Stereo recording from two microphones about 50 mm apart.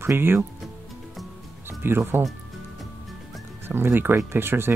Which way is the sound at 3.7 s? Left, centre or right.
Right.